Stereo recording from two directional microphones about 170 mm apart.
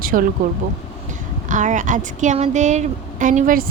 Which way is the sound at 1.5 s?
45° right (ahead or behind).